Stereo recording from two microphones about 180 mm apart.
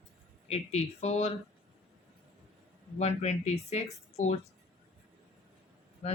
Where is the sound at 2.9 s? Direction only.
40° left (ahead or behind).